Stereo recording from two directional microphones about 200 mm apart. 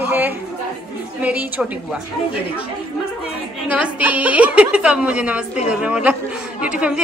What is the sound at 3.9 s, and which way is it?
A woman's voice, 5° right (ahead or behind).